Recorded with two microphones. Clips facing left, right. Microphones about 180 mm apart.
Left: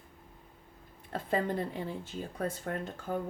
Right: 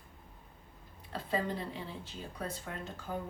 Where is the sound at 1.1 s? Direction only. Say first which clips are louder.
Left 4 dB; 50° left (ahead or behind).